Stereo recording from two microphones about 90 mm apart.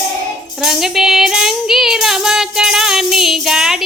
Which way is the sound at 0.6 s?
5° right (ahead or behind).